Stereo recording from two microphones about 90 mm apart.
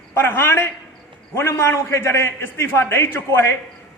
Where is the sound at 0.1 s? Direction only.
25° left (ahead or behind).